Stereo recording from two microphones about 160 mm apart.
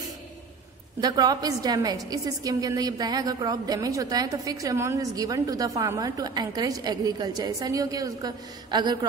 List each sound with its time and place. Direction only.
1.0 s a woman's voice: 25° right (ahead or behind)